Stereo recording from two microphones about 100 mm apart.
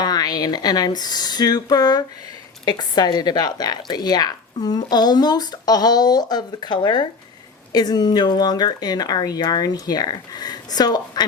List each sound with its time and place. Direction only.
0.0 s speech: 40° left (ahead or behind)